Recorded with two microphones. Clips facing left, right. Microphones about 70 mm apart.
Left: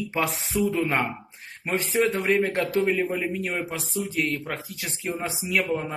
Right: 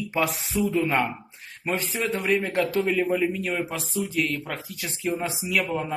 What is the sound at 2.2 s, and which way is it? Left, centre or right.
Speech, left.